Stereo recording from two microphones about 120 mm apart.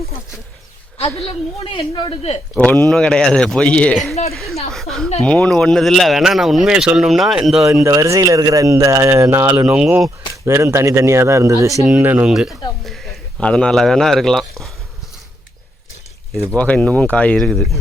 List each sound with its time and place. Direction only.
1.5 s a man's voice: 40° left (ahead or behind)
2.6 s speech: 10° left (ahead or behind)
7.7 s speech: 25° right (ahead or behind)
11.9 s speech: 15° right (ahead or behind)
12.3 s speech: centre (ahead or behind)
16.3 s speech: centre (ahead or behind)